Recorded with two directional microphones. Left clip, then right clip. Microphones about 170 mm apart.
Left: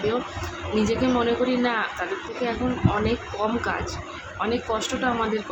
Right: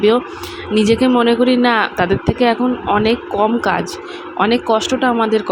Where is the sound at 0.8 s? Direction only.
50° right (ahead or behind).